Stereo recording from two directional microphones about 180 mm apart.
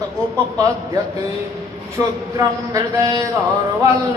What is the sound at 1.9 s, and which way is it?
A man's voice, 15° right (ahead or behind).